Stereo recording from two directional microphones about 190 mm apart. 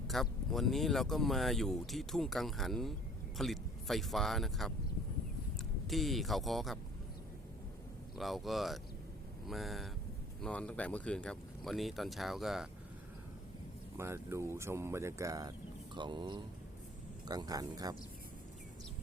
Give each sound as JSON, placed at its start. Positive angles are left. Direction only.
{"t": 0.1, "sound": "speech", "side_deg": 0}
{"t": 8.1, "sound": "speech", "side_deg": 0}
{"t": 13.9, "sound": "speech", "side_deg": -15}